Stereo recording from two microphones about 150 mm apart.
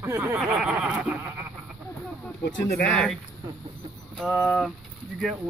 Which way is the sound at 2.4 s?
90° left.